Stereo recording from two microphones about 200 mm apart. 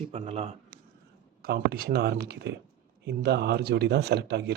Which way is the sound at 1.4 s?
50° right (ahead or behind).